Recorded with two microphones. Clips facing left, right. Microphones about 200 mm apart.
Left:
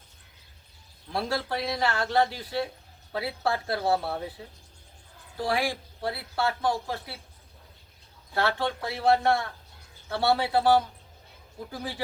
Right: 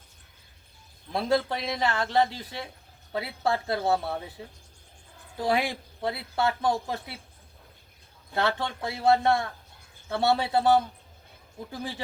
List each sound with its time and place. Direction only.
1.1 s speech: 20° right (ahead or behind)
5.4 s speech: 20° right (ahead or behind)
8.4 s speech: 20° right (ahead or behind)